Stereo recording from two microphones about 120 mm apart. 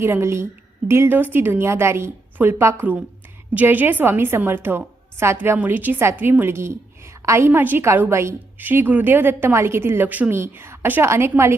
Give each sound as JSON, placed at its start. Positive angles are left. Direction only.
{"t": 0.0, "sound": "a woman's voice", "side_deg": -20}